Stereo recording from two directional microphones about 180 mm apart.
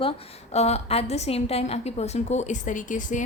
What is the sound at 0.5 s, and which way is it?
A woman's voice, 35° left (ahead or behind).